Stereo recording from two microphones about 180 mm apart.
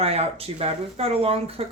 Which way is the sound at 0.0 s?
35° right (ahead or behind).